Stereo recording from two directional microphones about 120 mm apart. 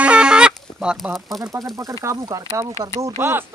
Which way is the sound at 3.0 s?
20° right (ahead or behind).